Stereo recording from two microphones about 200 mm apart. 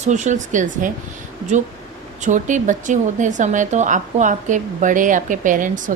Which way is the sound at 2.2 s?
40° right (ahead or behind).